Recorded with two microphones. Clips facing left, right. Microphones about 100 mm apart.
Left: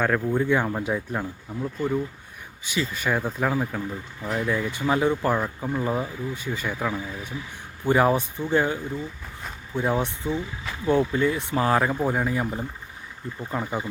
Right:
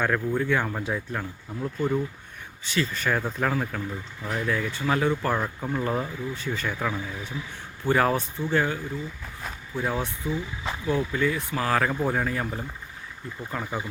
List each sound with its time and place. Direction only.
0.0 s speech: 15° left (ahead or behind)
1.6 s speech: 5° left (ahead or behind)
5.4 s speech: 5° left (ahead or behind); by 11.8 s 25° left (ahead or behind)
11.8 s speech: 10° left (ahead or behind)